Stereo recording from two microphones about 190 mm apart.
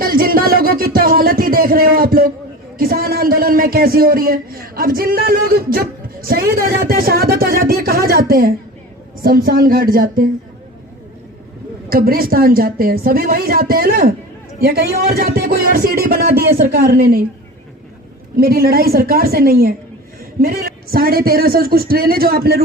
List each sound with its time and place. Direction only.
0.0 s music: 50° right (ahead or behind)
2.7 s speech: 50° right (ahead or behind)
11.9 s speech: 50° right (ahead or behind)
18.3 s speech: 55° right (ahead or behind)